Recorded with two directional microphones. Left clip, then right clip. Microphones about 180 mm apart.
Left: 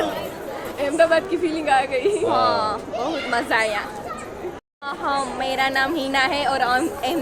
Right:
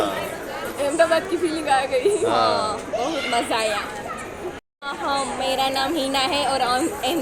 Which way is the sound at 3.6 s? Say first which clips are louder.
Left 1 dB; 20° left (ahead or behind).